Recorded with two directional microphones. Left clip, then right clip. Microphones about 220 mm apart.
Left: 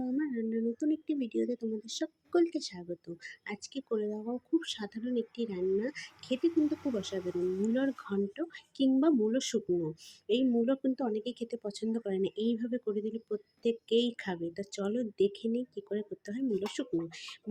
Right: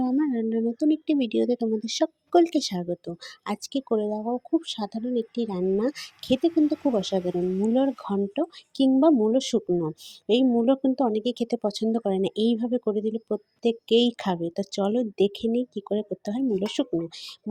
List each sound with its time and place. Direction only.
0.0 s speech: 30° right (ahead or behind)